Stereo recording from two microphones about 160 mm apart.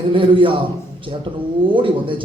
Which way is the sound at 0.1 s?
35° right (ahead or behind).